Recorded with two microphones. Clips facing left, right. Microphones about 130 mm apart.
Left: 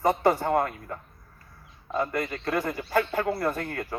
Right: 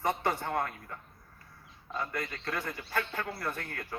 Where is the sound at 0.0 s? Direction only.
45° left (ahead or behind); by 2.8 s 60° left (ahead or behind).